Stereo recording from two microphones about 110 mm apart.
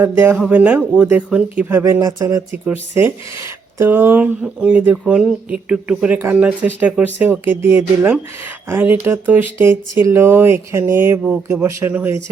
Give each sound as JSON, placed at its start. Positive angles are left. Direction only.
{"t": 0.0, "sound": "speech", "side_deg": -20}
{"t": 1.8, "sound": "speech", "side_deg": -35}
{"t": 3.8, "sound": "speech", "side_deg": -20}